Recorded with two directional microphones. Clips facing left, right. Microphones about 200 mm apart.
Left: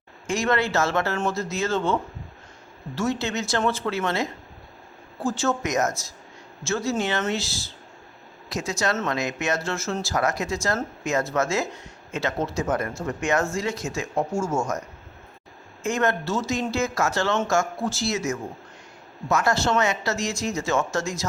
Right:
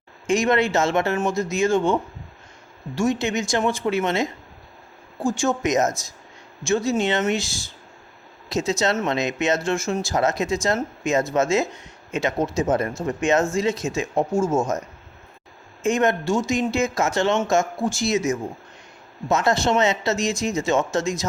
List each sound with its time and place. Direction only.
0.3 s speech: 20° right (ahead or behind)
15.8 s speech: 20° right (ahead or behind)